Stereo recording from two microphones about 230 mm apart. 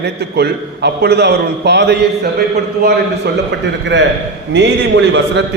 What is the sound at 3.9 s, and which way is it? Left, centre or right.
A man's voice, right.